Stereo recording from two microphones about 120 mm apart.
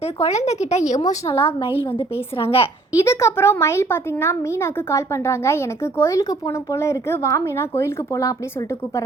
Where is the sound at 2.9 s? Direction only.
25° left (ahead or behind).